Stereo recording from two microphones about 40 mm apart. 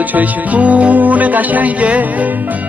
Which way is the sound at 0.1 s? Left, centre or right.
Right.